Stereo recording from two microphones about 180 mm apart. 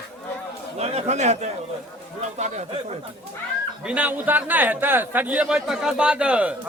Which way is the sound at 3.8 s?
10° right (ahead or behind).